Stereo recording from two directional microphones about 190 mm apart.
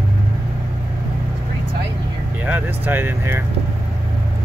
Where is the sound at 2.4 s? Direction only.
10° right (ahead or behind).